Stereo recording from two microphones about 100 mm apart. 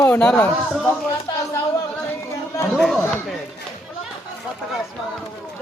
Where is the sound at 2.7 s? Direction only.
Centre (ahead or behind).